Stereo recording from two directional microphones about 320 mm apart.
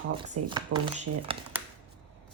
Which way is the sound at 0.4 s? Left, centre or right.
Right.